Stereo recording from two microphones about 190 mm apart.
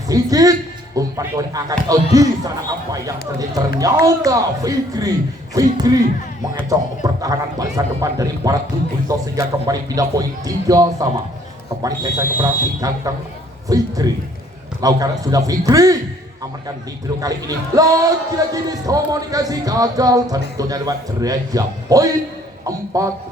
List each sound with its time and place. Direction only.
0.1 s a man's voice: 20° right (ahead or behind)
17.2 s speech: 20° right (ahead or behind)